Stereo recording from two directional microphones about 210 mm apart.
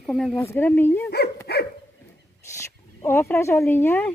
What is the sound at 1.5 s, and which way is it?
Dog, 50° left (ahead or behind).